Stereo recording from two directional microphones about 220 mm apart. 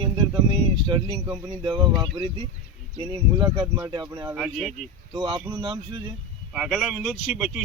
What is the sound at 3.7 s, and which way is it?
Speech, 15° right (ahead or behind).